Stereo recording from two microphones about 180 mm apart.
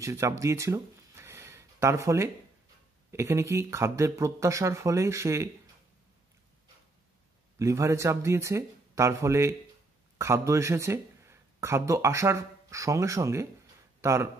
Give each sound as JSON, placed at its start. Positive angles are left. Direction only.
{"t": 0.0, "sound": "speech", "side_deg": -15}
{"t": 7.5, "sound": "speech", "side_deg": -15}